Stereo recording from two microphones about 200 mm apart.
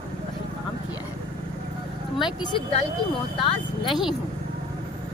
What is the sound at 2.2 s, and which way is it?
Speech, 25° left (ahead or behind).